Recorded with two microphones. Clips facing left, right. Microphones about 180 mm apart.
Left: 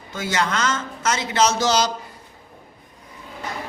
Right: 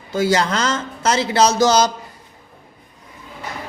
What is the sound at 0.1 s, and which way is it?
A man's voice, 35° right (ahead or behind).